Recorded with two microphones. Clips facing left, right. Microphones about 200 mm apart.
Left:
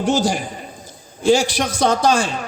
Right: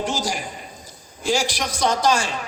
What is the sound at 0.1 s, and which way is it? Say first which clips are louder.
Speech: left 8 dB; 60° left (ahead or behind).